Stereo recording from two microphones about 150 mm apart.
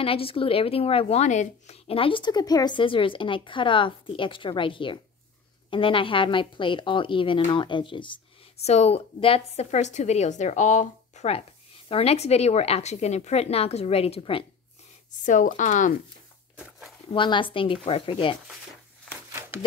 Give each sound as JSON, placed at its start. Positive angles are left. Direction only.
{"t": 0.0, "sound": "a woman's voice", "side_deg": 40}
{"t": 8.6, "sound": "a woman's voice", "side_deg": 45}
{"t": 15.2, "sound": "speech", "side_deg": 60}
{"t": 17.1, "sound": "a woman's voice", "side_deg": 35}